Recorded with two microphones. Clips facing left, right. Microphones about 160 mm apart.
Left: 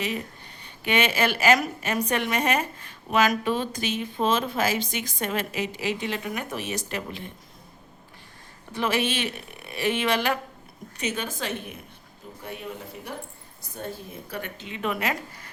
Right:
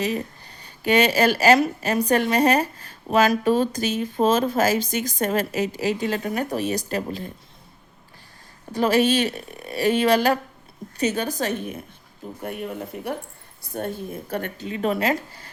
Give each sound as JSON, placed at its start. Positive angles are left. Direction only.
{"t": 0.6, "sound": "a woman's voice", "side_deg": -40}
{"t": 8.7, "sound": "a woman's voice", "side_deg": -40}
{"t": 13.7, "sound": "a woman's voice", "side_deg": -55}